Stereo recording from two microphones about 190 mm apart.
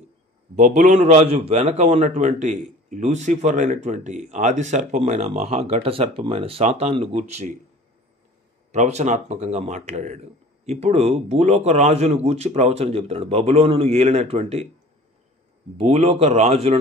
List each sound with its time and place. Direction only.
0.6 s a man's voice: 40° right (ahead or behind)
8.7 s a man's voice: 35° right (ahead or behind)
15.8 s a man's voice: 30° right (ahead or behind)